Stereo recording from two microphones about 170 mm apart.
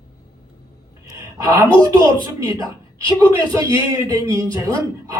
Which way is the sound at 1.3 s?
20° right (ahead or behind).